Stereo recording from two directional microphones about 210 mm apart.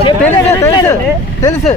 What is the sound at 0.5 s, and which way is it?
Speech, 15° left (ahead or behind).